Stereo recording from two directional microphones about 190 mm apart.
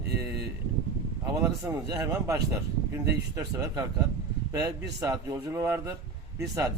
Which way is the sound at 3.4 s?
20° right (ahead or behind).